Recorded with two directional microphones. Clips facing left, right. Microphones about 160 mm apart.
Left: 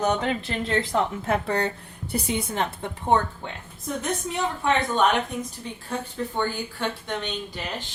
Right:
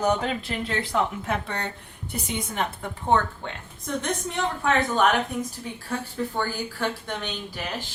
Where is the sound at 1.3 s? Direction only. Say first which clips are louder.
Left 5 dB; 35° left (ahead or behind).